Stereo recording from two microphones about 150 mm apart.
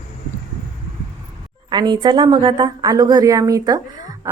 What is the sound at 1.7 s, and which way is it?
A woman's voice, 30° right (ahead or behind).